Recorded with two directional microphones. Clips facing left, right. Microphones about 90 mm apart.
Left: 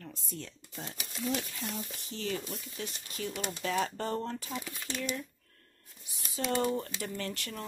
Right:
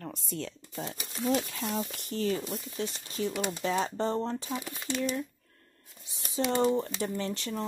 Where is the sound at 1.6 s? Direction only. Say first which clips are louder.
Right 6 dB; 80° right.